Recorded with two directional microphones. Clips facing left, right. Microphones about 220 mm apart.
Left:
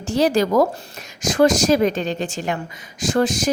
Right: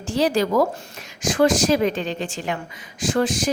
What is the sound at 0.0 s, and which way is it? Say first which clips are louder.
Speech: left 2 dB; 45° left (ahead or behind).